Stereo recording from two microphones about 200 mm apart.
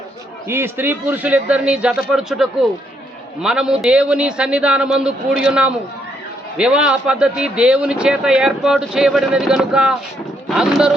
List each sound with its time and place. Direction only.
0.4 s a man's voice: 10° right (ahead or behind)